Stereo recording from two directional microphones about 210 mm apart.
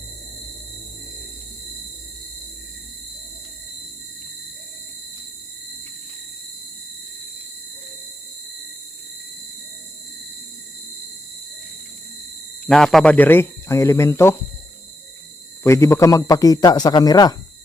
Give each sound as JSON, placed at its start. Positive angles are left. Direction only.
{"t": 12.6, "sound": "speech", "side_deg": 0}
{"t": 15.6, "sound": "speech", "side_deg": 15}